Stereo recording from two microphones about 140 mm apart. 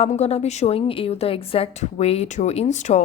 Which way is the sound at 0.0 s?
50° left (ahead or behind).